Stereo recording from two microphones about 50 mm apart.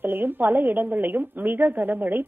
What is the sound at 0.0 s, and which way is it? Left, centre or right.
A woman's voice, right.